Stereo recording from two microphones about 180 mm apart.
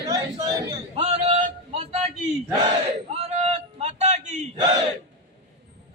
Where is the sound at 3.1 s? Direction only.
35° right (ahead or behind).